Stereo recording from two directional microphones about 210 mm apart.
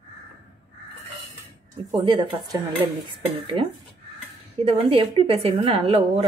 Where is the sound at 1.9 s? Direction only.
25° right (ahead or behind).